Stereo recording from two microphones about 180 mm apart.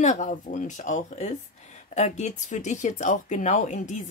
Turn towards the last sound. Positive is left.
turn(degrees=45)  # may be behind; listen again after turning